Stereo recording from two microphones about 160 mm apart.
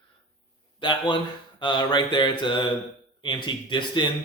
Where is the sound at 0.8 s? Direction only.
30° left (ahead or behind).